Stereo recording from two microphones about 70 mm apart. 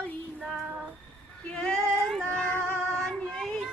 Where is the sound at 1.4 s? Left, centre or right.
Centre.